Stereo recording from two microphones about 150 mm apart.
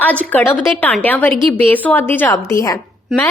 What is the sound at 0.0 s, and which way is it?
A woman's voice, 10° left (ahead or behind).